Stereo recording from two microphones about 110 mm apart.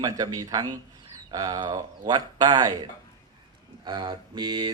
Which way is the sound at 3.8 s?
45° right (ahead or behind).